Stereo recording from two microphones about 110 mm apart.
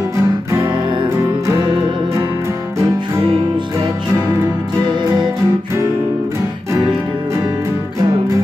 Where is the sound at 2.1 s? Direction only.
30° right (ahead or behind).